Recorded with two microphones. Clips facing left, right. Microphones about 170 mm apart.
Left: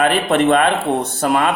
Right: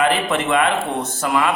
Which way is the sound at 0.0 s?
60° left (ahead or behind).